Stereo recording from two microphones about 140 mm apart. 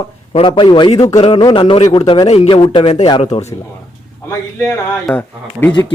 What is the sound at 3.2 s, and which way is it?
Speech, 50° left (ahead or behind).